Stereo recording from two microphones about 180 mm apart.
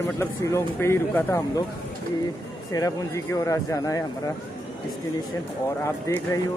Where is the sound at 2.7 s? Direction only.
20° left (ahead or behind).